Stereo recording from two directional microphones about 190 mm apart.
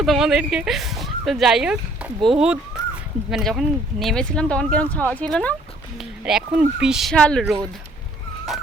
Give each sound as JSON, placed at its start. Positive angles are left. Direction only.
{"t": 0.0, "sound": "speech", "side_deg": 0}